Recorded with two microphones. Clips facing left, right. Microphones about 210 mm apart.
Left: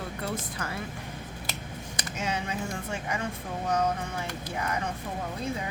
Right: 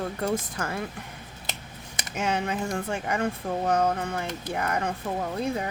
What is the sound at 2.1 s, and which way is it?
Speech, 55° right (ahead or behind).